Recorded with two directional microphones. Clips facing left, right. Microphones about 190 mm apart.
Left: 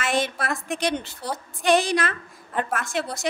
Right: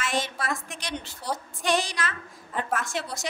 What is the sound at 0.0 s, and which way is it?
A woman's voice, 60° left (ahead or behind).